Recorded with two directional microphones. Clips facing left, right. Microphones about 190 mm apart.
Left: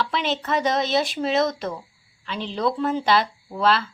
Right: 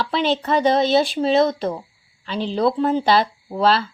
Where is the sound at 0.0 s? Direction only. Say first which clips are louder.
Right 4 dB; 35° right (ahead or behind).